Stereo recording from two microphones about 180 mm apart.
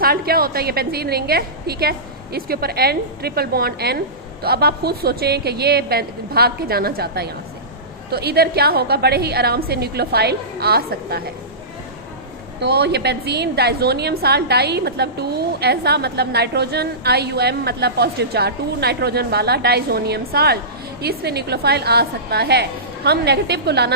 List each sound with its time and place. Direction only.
0.0 s a woman's voice: 55° right (ahead or behind)
12.5 s a woman's voice: 65° right (ahead or behind)